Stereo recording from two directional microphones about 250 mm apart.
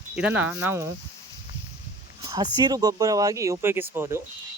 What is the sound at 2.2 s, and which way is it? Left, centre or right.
Speech, centre.